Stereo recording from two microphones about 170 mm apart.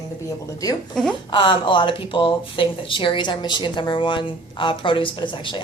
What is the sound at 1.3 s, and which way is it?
Speech, 30° left (ahead or behind).